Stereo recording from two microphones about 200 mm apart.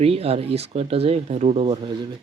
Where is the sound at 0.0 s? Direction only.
30° right (ahead or behind).